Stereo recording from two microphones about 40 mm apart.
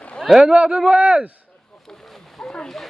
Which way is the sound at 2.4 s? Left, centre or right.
Left.